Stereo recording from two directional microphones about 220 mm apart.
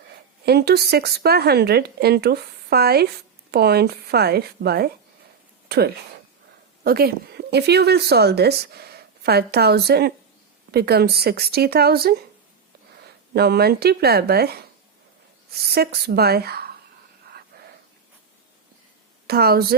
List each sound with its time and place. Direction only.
0.4 s speech: 45° right (ahead or behind)
13.3 s speech: 45° right (ahead or behind)
15.7 s speech: 45° right (ahead or behind)
17.5 s a sound: 45° right (ahead or behind)
19.3 s speech: 45° right (ahead or behind)